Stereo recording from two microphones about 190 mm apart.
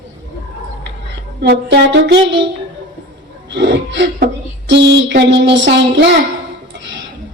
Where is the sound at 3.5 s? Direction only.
65° right (ahead or behind).